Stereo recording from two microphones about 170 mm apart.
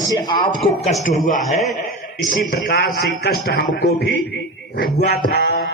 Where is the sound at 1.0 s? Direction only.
50° left (ahead or behind).